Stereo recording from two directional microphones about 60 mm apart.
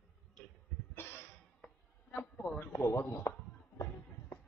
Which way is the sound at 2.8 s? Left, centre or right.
Left.